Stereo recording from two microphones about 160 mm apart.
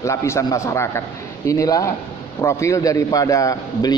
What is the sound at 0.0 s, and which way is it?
A man's voice, 20° left (ahead or behind).